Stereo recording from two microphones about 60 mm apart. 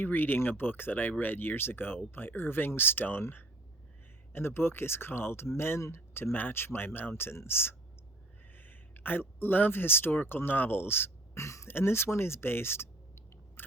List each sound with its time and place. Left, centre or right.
0.0 s speech: left
11.3 s throat clearing: left
11.7 s speech: left
13.6 s chewing: left